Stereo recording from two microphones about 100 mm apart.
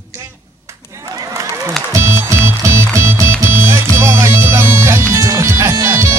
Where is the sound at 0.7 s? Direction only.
30° right (ahead or behind).